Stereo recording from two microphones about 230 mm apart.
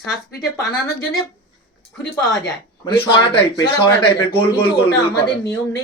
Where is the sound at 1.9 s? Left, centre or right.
Centre.